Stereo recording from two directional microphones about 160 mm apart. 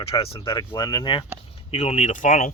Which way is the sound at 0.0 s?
35° left (ahead or behind).